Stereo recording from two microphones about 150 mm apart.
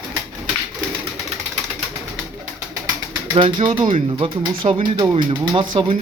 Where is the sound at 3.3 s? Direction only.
35° right (ahead or behind).